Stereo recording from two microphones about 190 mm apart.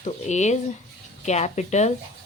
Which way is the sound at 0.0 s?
35° left (ahead or behind).